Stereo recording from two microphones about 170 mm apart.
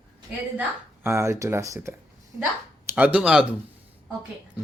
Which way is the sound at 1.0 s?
15° right (ahead or behind).